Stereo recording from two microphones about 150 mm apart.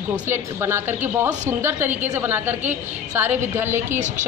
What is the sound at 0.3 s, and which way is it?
A man's voice, 15° right (ahead or behind).